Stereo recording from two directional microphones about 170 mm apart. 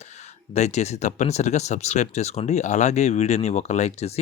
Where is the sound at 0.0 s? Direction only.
40° left (ahead or behind).